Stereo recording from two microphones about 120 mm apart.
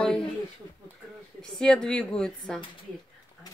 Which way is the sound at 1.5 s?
5° left (ahead or behind).